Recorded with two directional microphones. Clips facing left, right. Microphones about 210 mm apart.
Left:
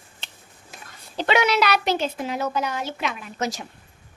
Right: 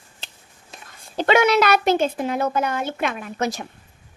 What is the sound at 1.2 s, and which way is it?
Speech, 50° right (ahead or behind).